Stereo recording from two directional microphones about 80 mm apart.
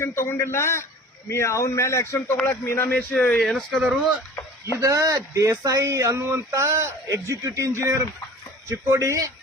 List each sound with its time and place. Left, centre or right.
0.0 s a man's voice: left
2.1 s speech: centre
2.5 s a man's voice: left
3.0 s speech: centre
3.4 s speech: centre
4.8 s speech: right